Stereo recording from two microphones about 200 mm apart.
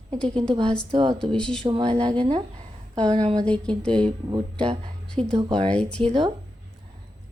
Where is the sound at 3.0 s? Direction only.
20° right (ahead or behind).